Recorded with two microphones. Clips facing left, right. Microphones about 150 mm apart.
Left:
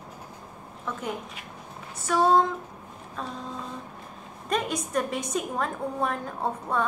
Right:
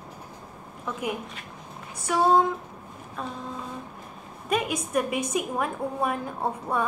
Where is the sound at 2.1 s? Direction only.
10° right (ahead or behind).